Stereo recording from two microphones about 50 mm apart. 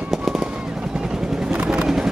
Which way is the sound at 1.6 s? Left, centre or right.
Right.